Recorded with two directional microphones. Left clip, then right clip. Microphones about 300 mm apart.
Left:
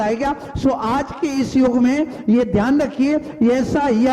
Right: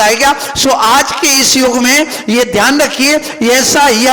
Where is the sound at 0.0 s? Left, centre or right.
Centre.